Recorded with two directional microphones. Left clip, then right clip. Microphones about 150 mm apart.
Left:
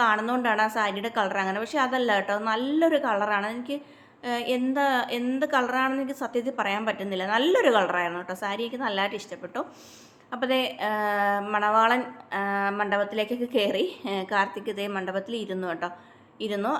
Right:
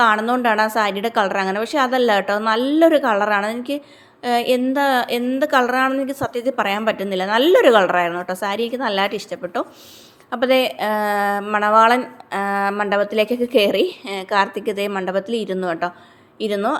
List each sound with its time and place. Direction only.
0.0 s a woman's voice: 40° right (ahead or behind)